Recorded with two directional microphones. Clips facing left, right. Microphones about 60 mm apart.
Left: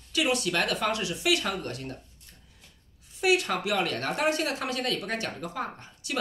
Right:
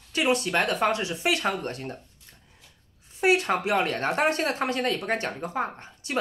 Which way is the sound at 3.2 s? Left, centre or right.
Right.